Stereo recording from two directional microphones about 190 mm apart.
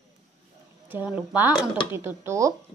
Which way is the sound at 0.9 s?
10° right (ahead or behind).